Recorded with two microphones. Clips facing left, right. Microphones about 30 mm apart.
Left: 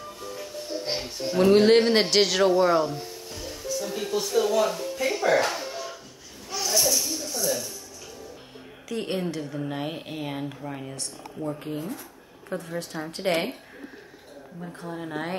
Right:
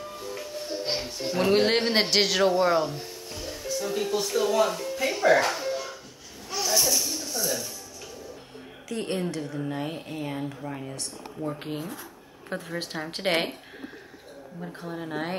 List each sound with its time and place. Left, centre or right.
0.7 s music: centre
1.2 s speech: centre
6.5 s a sound: centre
8.8 s a woman's voice: centre
9.7 s speech: centre
10.4 s a woman's voice: centre
11.6 s speech: right
13.2 s a woman's voice: right
14.8 s a woman's voice: centre